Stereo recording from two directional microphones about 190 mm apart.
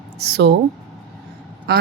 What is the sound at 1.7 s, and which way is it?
Speech, 60° right (ahead or behind).